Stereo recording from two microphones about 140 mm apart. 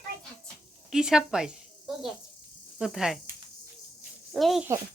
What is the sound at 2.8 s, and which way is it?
Speech, 5° right (ahead or behind).